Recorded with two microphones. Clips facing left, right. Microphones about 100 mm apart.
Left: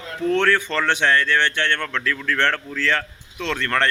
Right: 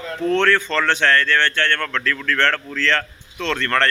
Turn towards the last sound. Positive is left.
turn(degrees=10)  # may be behind; listen again after turning